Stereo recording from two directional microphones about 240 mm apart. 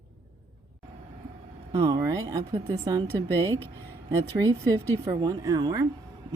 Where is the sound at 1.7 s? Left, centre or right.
Centre.